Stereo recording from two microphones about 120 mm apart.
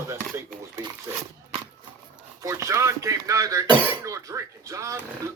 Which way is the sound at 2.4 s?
25° right (ahead or behind).